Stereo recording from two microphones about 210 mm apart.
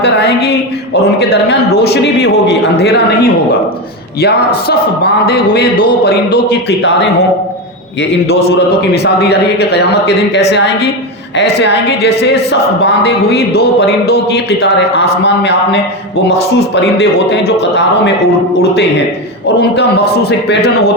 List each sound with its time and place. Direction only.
0.0 s a man's voice: 55° left (ahead or behind)
8.5 s a man's voice: 55° left (ahead or behind)
17.0 s a woman's voice: 55° left (ahead or behind)
19.5 s a man's voice: 50° left (ahead or behind)